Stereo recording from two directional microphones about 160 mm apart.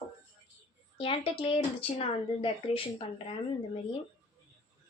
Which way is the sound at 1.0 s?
35° left (ahead or behind).